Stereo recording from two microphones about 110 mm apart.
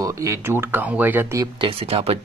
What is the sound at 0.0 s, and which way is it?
Speech, 30° right (ahead or behind).